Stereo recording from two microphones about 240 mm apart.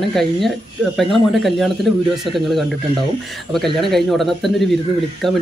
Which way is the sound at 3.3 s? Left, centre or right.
Centre.